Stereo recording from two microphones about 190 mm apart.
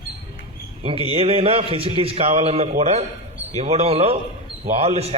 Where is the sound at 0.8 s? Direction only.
30° right (ahead or behind).